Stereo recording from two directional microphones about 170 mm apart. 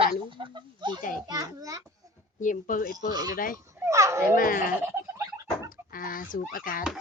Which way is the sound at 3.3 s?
55° left (ahead or behind).